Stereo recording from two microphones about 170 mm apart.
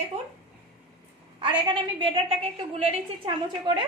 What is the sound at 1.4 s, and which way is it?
A woman's voice, 30° right (ahead or behind).